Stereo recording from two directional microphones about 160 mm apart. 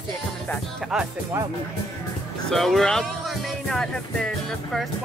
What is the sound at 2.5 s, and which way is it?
Speech, centre (ahead or behind).